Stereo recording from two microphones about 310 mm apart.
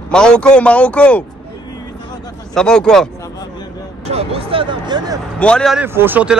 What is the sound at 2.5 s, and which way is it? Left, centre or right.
Speech, centre.